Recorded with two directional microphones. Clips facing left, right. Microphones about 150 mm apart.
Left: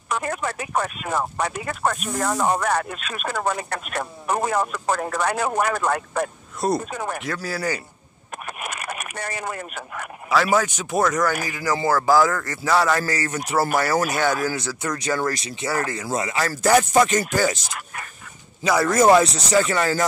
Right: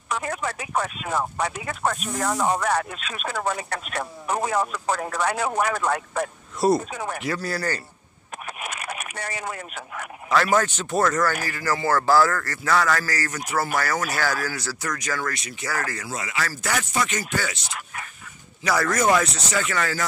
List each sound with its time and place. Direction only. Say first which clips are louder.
0.1 s speech: left 2 dB; 50° left (ahead or behind)
7.4 s a man's voice: left 1 dB; 5° left (ahead or behind)
8.5 s a sound: left 2 dB; 50° left (ahead or behind)
10.3 s a man's voice: left 1 dB; 10° left (ahead or behind); by 16.1 s 25° left (ahead or behind)
16.1 s speech: left 5 dB; 35° left (ahead or behind)
18.6 s speech: left 4 dB; 25° left (ahead or behind)